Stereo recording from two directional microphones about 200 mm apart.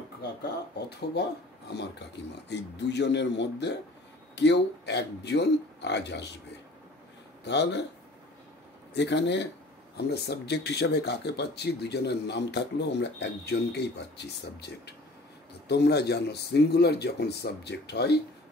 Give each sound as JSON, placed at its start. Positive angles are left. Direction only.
{"t": 0.2, "sound": "speech", "side_deg": 55}
{"t": 7.4, "sound": "speech", "side_deg": 60}
{"t": 8.9, "sound": "speech", "side_deg": 60}